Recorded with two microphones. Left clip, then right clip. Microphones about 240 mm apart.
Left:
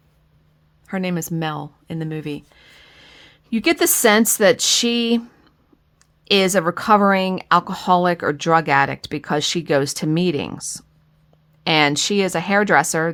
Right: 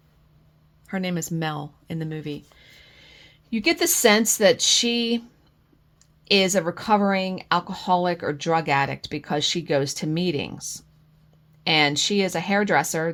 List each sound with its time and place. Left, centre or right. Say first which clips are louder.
0.9 s speech: left 4 dB; centre
6.2 s speech: left 4 dB; left